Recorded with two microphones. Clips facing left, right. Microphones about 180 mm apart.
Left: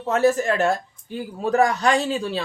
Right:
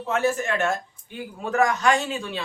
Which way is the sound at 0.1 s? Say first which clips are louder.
Left 5 dB; 40° left (ahead or behind).